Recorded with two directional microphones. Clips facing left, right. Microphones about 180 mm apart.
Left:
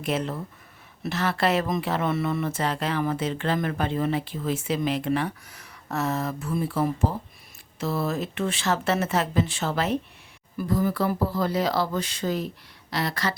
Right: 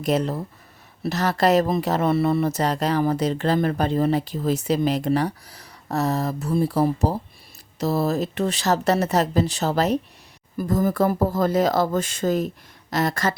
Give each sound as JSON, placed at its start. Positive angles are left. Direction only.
{"t": 0.0, "sound": "a woman's voice", "side_deg": -40}